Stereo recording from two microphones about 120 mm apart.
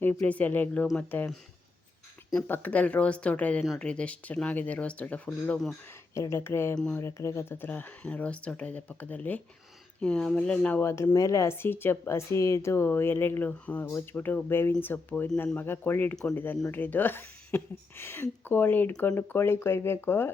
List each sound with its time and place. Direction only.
0.0 s speech: 15° left (ahead or behind)
2.3 s speech: 15° left (ahead or behind)
6.1 s speech: 25° left (ahead or behind)
6.7 s speech: 5° left (ahead or behind)
7.0 s speech: 25° left (ahead or behind)
10.8 s speech: 25° left (ahead or behind)